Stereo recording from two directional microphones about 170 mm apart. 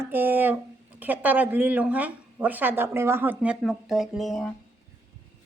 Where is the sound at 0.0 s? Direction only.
10° right (ahead or behind).